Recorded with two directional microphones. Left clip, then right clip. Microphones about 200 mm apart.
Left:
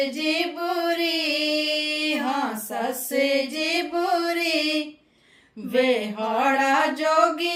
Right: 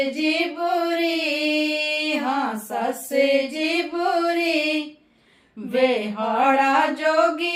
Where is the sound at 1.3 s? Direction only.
Centre (ahead or behind).